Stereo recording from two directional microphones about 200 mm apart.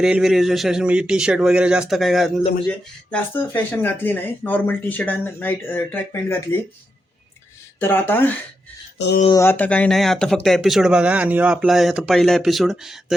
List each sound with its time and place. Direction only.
0.0 s speech: centre (ahead or behind)
7.8 s speech: 10° left (ahead or behind)
9.0 s speech: 55° left (ahead or behind)
9.3 s speech: 10° left (ahead or behind)